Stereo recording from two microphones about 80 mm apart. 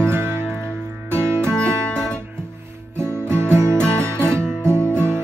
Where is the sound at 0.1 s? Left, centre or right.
Right.